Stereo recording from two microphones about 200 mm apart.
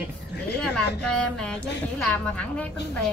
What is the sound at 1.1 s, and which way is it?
A woman's voice, 5° left (ahead or behind).